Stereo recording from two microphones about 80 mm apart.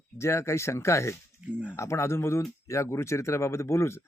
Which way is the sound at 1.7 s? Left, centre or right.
Left.